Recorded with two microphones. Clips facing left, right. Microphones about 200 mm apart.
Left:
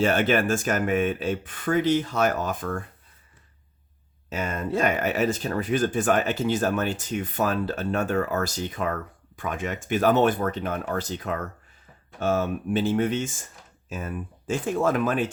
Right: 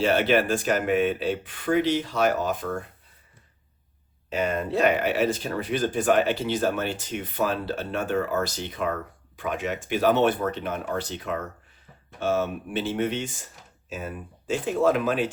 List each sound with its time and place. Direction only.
0.0 s speech: 50° left (ahead or behind)
4.4 s speech: 45° left (ahead or behind)